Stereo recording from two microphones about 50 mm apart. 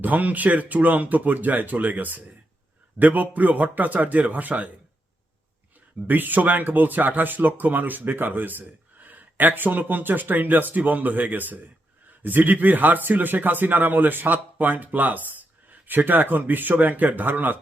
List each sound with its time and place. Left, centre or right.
0.0 s speech: right
6.1 s speech: right